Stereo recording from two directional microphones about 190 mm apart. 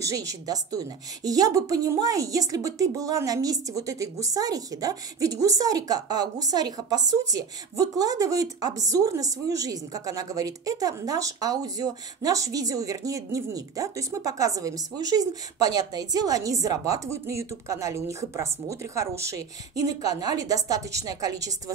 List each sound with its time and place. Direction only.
0.0 s a woman's voice: 20° right (ahead or behind)